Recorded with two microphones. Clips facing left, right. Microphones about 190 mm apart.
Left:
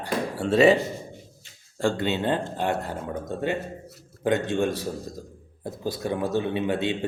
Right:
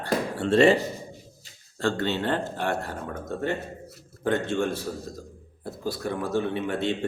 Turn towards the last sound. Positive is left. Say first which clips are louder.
# left 2 dB
turn(degrees=15)  # may be behind; listen again after turning